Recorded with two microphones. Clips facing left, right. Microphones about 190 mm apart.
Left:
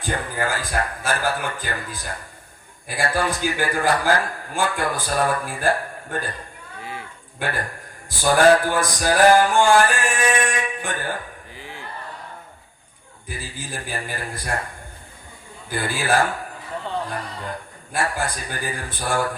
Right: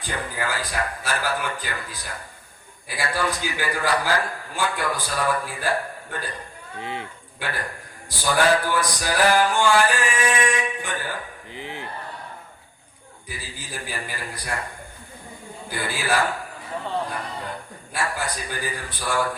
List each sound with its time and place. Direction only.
0.0 s a man's voice: 50° left (ahead or behind)
6.7 s a sound: 20° right (ahead or behind)
8.2 s a man's voice: 50° left (ahead or behind)
11.5 s a sound: 20° right (ahead or behind)
13.8 s a man's voice: 50° left (ahead or behind)
15.7 s a man's voice: 45° left (ahead or behind)
17.9 s a man's voice: 50° left (ahead or behind)